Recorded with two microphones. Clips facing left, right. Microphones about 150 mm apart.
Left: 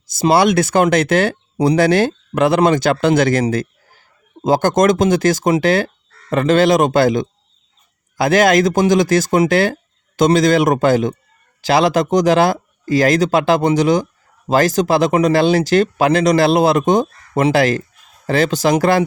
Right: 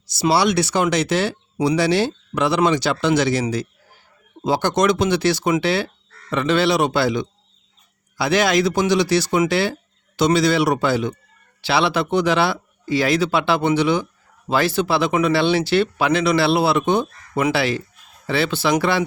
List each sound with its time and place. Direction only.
0.2 s speech: 50° left (ahead or behind)
4.4 s speech: 45° left (ahead or behind)